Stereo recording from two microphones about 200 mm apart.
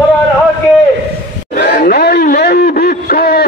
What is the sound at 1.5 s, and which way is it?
A man's voice, 40° left (ahead or behind).